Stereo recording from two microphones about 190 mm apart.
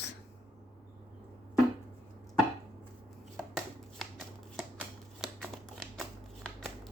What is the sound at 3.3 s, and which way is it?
Shuffling cards, centre (ahead or behind).